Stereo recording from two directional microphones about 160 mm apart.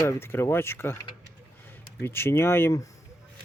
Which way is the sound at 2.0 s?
15° left (ahead or behind).